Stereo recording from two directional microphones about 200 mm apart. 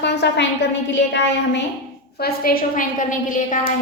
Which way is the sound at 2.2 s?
50° left (ahead or behind).